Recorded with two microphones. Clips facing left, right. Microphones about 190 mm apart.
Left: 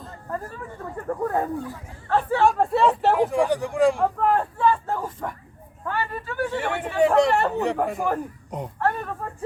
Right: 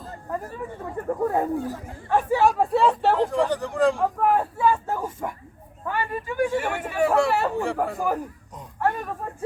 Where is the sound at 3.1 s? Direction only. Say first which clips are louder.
Left 1 dB; 15° left (ahead or behind).